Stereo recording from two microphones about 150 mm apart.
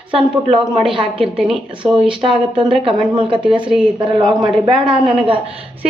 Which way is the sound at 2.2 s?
35° right (ahead or behind).